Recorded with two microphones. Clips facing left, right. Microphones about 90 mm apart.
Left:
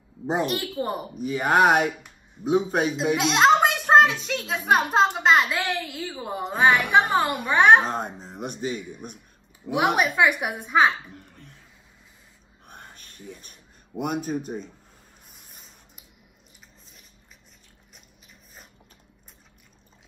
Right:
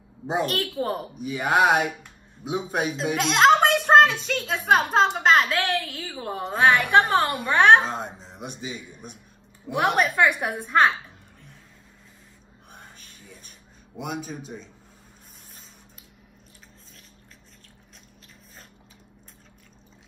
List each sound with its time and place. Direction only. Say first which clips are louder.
0.5 s a woman's voice: right 1 dB; 10° left (ahead or behind)
1.1 s speech: left 2 dB; 40° left (ahead or behind)
3.2 s a woman's voice: right 1 dB; 5° left (ahead or behind)
7.8 s speech: left 2 dB; 50° left (ahead or behind)
9.8 s a woman's voice: even; 10° left (ahead or behind)
11.1 s a sound: left 4 dB; 55° left (ahead or behind)
12.6 s a sound: left 2 dB; 55° left (ahead or behind)